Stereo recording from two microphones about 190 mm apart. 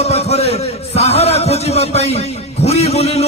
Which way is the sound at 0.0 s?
35° left (ahead or behind).